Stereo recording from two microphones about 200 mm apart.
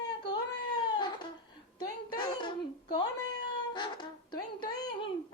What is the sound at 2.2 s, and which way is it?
Speech, 20° left (ahead or behind).